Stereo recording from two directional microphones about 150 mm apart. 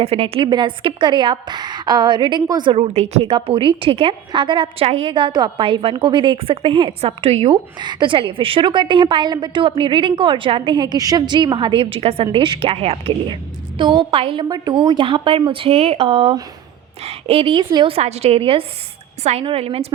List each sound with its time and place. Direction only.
0.0 s a woman's voice: 40° right (ahead or behind)
7.8 s a woman's voice: 30° right (ahead or behind)
14.4 s a woman's voice: 25° right (ahead or behind); by 19.9 s 40° right (ahead or behind)